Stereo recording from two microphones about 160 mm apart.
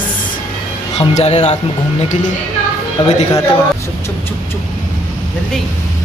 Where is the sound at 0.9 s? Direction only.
45° left (ahead or behind).